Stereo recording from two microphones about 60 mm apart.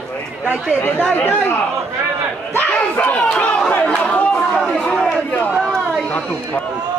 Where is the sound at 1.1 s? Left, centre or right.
Left.